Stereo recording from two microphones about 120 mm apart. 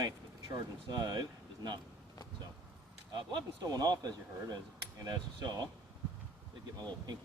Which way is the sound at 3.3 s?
35° right (ahead or behind).